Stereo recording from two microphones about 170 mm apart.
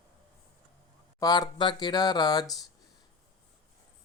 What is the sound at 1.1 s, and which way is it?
Speech, 20° left (ahead or behind).